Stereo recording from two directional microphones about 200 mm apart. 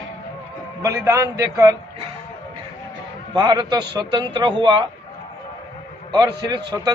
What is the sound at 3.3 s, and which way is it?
A man's voice, 20° right (ahead or behind).